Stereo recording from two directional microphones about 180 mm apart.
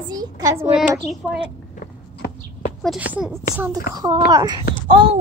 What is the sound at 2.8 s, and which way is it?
Speech, 5° right (ahead or behind).